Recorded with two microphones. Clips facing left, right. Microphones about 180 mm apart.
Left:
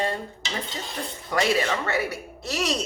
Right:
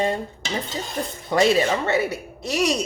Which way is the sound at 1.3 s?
25° right (ahead or behind).